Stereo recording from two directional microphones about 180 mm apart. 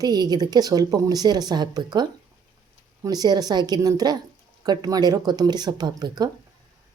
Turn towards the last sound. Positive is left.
turn(degrees=-20)  # may be behind; listen again after turning